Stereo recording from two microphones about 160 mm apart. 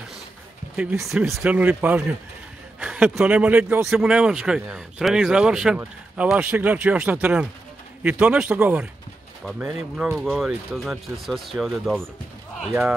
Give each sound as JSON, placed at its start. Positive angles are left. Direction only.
{"t": 0.7, "sound": "speech", "side_deg": 0}